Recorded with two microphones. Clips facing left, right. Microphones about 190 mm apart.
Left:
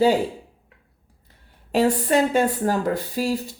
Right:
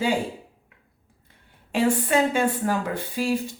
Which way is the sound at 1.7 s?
40° left (ahead or behind).